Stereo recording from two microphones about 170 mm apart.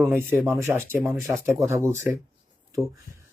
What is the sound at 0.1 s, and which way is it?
Speech, 10° right (ahead or behind).